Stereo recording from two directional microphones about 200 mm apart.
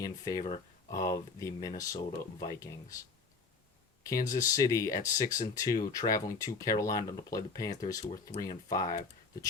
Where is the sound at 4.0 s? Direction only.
15° left (ahead or behind).